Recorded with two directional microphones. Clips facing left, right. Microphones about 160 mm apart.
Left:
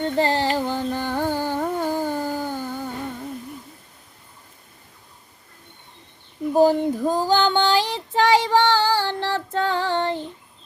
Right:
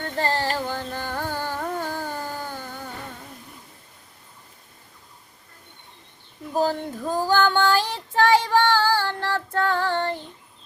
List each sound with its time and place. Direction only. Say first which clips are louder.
0.0 s carnatic music: left 4 dB; 15° left (ahead or behind)
6.5 s child singing: left 7 dB; 15° left (ahead or behind)